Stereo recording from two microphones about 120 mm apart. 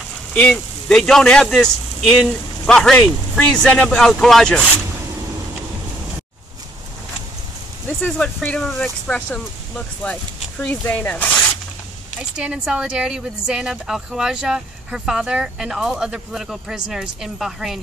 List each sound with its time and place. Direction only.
0.3 s speech: 10° left (ahead or behind)
8.0 s speech: 10° left (ahead or behind)
12.2 s speech: 5° right (ahead or behind)